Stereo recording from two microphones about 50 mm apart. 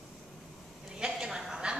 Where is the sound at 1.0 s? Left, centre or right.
Centre.